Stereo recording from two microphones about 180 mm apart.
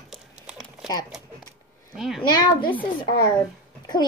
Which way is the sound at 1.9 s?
Centre (ahead or behind).